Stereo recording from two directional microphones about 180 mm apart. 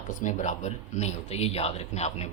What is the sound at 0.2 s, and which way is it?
Speech, 40° left (ahead or behind).